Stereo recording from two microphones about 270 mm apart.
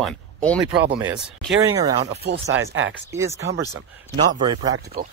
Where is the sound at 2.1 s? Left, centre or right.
Right.